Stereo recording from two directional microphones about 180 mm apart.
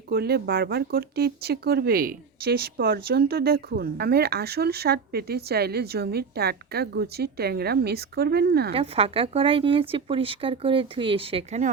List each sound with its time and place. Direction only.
0.1 s speech: 60° right (ahead or behind)
8.7 s speech: 30° right (ahead or behind)